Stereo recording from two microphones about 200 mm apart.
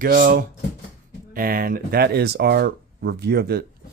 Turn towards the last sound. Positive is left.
turn(degrees=-50)  # may be behind; listen again after turning